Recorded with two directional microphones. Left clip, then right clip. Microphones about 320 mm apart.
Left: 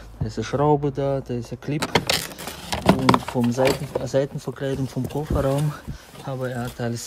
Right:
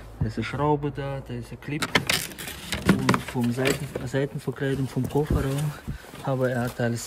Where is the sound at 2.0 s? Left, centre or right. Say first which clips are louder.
Left 2 dB; centre.